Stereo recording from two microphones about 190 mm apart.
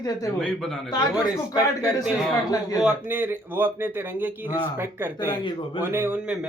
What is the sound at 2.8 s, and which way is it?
A man's voice, 10° right (ahead or behind).